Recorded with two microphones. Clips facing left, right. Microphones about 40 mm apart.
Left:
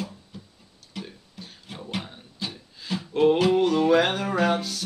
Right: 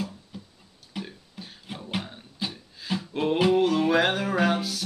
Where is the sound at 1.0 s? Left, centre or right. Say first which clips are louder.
Right 1 dB; centre.